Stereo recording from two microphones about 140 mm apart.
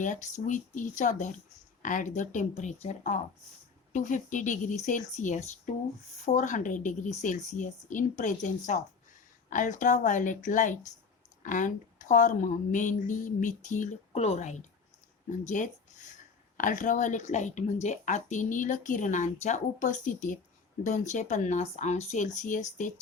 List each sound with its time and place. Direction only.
0.0 s a woman's voice: 60° left (ahead or behind)
14.1 s speech: 50° left (ahead or behind)
15.3 s a woman's voice: 65° left (ahead or behind)